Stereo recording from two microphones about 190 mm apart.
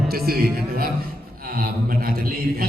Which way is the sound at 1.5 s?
50° right (ahead or behind).